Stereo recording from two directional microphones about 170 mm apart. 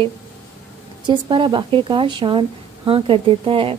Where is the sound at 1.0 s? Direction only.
30° right (ahead or behind).